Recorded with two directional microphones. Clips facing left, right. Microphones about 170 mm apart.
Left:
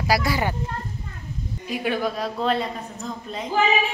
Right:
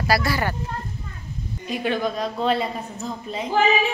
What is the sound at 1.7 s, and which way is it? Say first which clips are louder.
A woman's voice: right 1 dB; 10° left (ahead or behind).